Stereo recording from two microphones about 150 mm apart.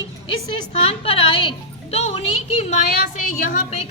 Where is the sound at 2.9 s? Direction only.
75° left (ahead or behind).